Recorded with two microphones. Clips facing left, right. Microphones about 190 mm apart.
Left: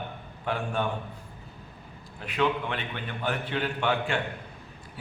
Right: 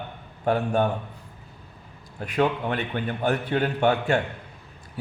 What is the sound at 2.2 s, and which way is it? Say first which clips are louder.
A man's voice: right 4 dB; 45° right (ahead or behind).